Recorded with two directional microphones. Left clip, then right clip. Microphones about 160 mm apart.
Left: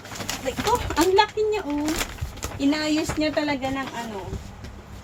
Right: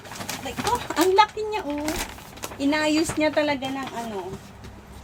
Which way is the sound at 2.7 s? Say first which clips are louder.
Right 2 dB; 30° right (ahead or behind).